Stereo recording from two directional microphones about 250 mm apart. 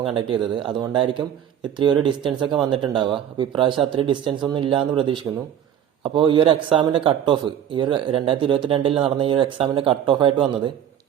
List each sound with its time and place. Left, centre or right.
0.2 s speech: centre